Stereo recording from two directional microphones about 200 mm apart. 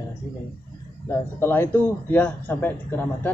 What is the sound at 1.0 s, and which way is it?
A man's voice, 10° left (ahead or behind).